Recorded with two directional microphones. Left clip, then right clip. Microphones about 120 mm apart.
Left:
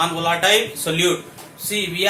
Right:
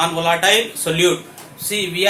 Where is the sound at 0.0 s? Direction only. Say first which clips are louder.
Right 2 dB; 55° right (ahead or behind).